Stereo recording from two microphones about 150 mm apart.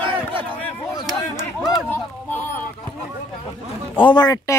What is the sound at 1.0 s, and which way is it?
Speech, centre (ahead or behind).